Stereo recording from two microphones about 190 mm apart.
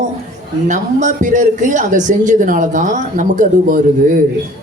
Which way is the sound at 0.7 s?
40° right (ahead or behind).